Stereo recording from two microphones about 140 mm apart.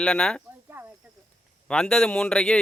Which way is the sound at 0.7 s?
15° right (ahead or behind).